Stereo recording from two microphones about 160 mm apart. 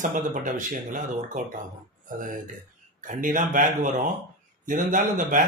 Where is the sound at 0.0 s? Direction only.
55° right (ahead or behind).